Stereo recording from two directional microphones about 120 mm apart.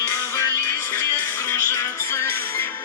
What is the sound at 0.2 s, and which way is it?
Music, 20° left (ahead or behind).